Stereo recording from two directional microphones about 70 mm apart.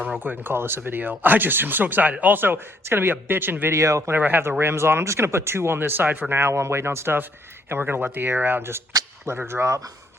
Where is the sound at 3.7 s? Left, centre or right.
Right.